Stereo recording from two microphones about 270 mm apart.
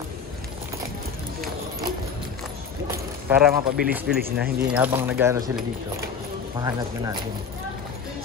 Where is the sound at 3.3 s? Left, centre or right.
Centre.